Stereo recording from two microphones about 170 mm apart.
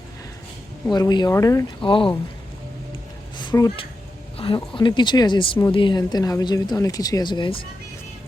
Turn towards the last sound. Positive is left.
turn(degrees=25)  # may be behind; listen again after turning